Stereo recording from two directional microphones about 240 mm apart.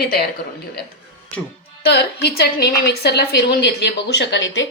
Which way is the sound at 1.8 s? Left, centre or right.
Left.